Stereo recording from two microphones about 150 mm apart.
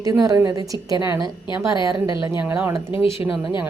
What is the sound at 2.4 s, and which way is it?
Speech, 15° right (ahead or behind).